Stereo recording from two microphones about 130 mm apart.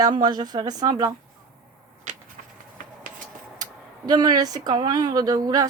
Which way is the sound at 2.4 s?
90° right.